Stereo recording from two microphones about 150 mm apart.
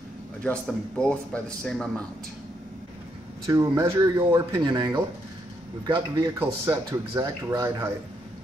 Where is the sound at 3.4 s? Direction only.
15° right (ahead or behind).